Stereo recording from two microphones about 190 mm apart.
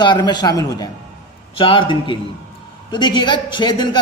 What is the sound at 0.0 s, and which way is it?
A man's voice, 25° left (ahead or behind).